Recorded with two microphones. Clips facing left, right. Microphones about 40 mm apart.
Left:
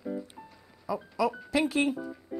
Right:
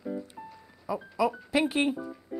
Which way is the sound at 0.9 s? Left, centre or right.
Centre.